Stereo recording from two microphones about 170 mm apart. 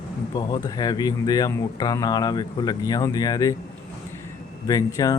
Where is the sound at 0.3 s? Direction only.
25° left (ahead or behind).